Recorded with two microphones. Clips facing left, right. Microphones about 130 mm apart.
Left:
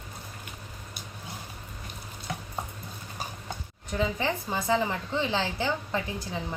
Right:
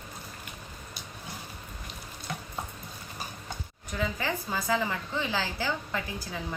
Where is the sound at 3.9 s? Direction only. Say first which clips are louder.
Left 3 dB; 25° left (ahead or behind).